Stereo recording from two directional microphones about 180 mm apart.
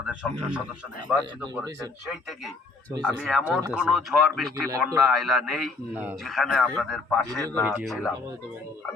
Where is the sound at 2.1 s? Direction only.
Centre (ahead or behind).